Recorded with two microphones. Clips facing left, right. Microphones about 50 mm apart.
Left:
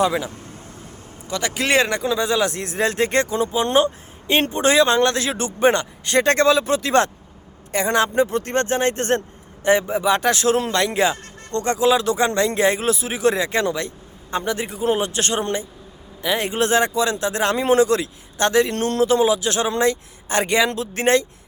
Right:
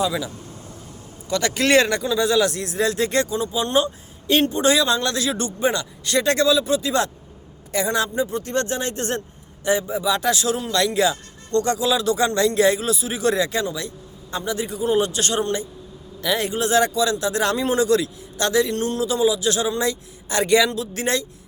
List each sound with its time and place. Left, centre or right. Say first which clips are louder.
0.0 s speech: left 3 dB; left
1.3 s speech: right 2 dB; centre; by 5.5 s left
5.5 s speech: left 5 dB; left
8.5 s speech: left 4 dB; left
13.6 s speech: left 4 dB; left
16.6 s speech: left 1 dB; left
20.7 s speech: left 1 dB; left
20.9 s speech: left 6 dB; left